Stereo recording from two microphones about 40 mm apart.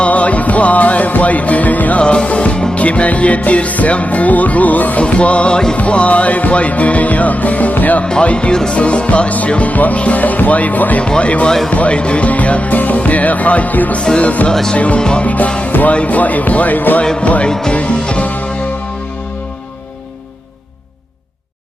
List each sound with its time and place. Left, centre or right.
0.0 s music: left
5.0 s music: left
8.0 s music: left
11.0 s music: left
17.2 s music: left